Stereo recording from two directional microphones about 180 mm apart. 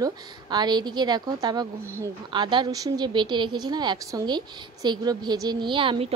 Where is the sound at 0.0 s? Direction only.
25° right (ahead or behind).